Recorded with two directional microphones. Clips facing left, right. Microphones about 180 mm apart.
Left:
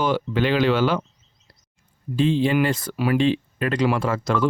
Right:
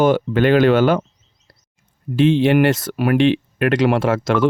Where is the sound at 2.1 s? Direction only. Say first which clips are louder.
Right 5 dB; 75° right (ahead or behind).